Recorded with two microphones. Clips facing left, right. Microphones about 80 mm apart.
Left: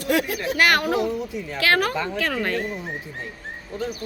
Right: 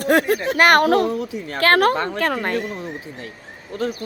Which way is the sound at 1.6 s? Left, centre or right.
Right.